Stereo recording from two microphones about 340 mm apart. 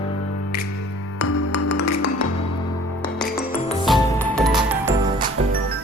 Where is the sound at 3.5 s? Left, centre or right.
Centre.